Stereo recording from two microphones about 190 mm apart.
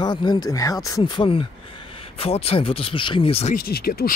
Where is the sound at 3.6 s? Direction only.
50° left (ahead or behind).